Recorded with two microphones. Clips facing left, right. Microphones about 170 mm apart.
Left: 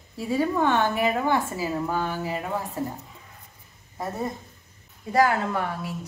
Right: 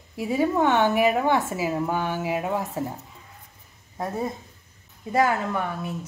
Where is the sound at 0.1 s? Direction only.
15° right (ahead or behind).